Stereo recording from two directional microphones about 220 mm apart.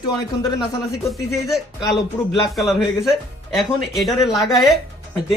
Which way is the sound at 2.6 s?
Centre (ahead or behind).